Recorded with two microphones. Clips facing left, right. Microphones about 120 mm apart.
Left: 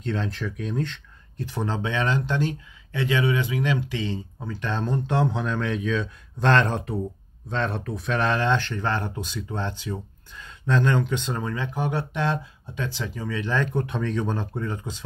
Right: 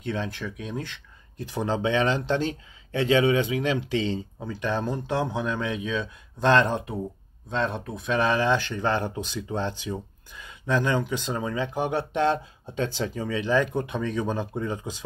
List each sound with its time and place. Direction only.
0.0 s speech: 5° right (ahead or behind)
1.4 s speech: 15° right (ahead or behind)
4.4 s speech: 15° right (ahead or behind)